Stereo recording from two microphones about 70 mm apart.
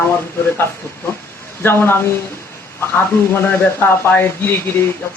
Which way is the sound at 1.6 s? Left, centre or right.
Left.